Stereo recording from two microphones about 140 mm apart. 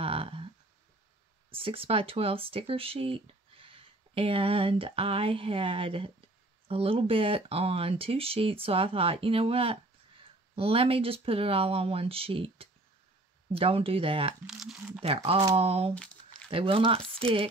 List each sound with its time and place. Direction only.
0.0 s a sound: 40° right (ahead or behind)
1.5 s speech: 40° right (ahead or behind)
14.4 s speech: centre (ahead or behind)
15.0 s speech: 45° right (ahead or behind)
15.9 s crumpling: 5° left (ahead or behind)
16.4 s speech: 40° right (ahead or behind)